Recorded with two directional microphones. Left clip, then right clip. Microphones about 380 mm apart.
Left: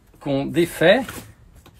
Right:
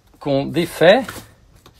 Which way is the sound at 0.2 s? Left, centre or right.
Centre.